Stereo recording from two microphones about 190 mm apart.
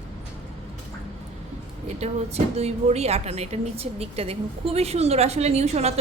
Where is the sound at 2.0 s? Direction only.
35° right (ahead or behind).